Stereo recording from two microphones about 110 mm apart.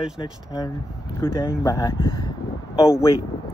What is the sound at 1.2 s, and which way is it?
Speech, 20° left (ahead or behind).